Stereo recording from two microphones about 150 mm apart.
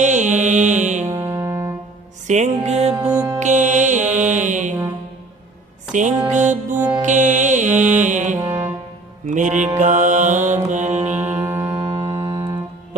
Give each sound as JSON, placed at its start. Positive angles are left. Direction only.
{"t": 0.0, "sound": "music", "side_deg": -55}
{"t": 1.0, "sound": "music", "side_deg": -20}
{"t": 2.2, "sound": "music", "side_deg": -50}
{"t": 2.9, "sound": "music", "side_deg": -5}
{"t": 3.4, "sound": "music", "side_deg": -55}
{"t": 5.9, "sound": "music", "side_deg": -55}
{"t": 8.4, "sound": "brass instrument", "side_deg": -20}
{"t": 9.2, "sound": "music", "side_deg": -55}
{"t": 11.1, "sound": "music", "side_deg": -15}